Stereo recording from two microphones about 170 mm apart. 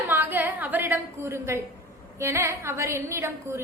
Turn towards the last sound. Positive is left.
turn(degrees=-15)  # may be behind; listen again after turning